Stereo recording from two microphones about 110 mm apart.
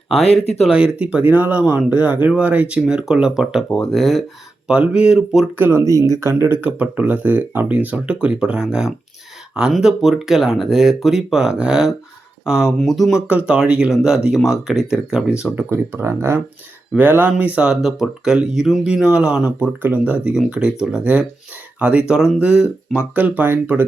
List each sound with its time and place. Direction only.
0.2 s speech: 70° left (ahead or behind)
0.7 s speech: 10° right (ahead or behind)
5.5 s speech: 20° right (ahead or behind)
15.7 s speech: 20° right (ahead or behind)